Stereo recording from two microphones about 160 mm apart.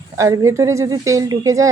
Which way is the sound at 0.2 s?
20° right (ahead or behind).